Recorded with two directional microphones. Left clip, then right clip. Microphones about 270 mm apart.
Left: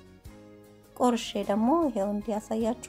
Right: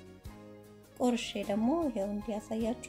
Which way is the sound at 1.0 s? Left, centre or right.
Centre.